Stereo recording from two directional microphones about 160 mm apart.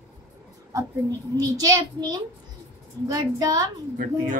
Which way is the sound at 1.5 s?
25° right (ahead or behind).